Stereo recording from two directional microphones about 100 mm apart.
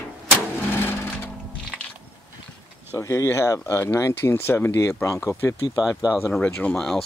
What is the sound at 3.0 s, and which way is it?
Speech, 30° left (ahead or behind).